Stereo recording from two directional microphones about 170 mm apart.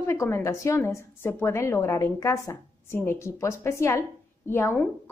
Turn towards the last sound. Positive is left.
turn(degrees=15)  # may be behind; listen again after turning